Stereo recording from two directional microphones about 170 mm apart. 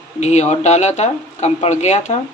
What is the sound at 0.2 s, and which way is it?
Speech, 40° left (ahead or behind).